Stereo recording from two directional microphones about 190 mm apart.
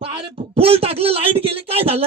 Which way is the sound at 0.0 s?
30° right (ahead or behind).